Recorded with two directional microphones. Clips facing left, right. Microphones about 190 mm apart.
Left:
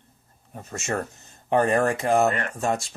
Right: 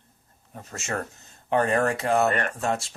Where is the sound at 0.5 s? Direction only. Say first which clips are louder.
Left 3 dB; 30° left (ahead or behind).